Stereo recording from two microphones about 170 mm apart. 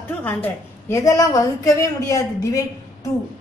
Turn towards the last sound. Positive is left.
turn(degrees=20)  # may be behind; listen again after turning